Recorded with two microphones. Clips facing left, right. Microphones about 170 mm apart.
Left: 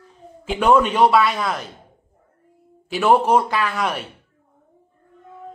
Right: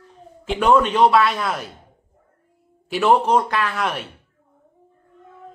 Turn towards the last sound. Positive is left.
turn(degrees=0)  # may be behind; listen again after turning